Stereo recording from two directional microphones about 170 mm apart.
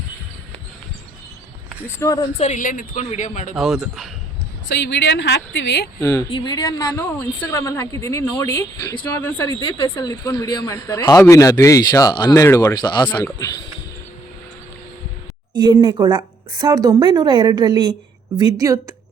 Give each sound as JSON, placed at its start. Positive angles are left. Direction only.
{"t": 2.0, "sound": "speech", "side_deg": 20}
{"t": 2.4, "sound": "speech", "side_deg": 50}
{"t": 3.5, "sound": "a man's voice", "side_deg": 0}
{"t": 4.7, "sound": "a woman's voice", "side_deg": 90}
{"t": 6.0, "sound": "a woman's voice", "side_deg": 10}
{"t": 6.3, "sound": "a woman's voice", "side_deg": 25}
{"t": 15.5, "sound": "a woman's voice", "side_deg": -25}